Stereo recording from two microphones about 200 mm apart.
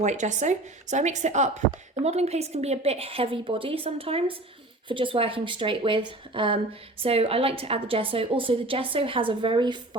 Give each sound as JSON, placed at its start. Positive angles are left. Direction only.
{"t": 0.0, "sound": "a woman's voice", "side_deg": -35}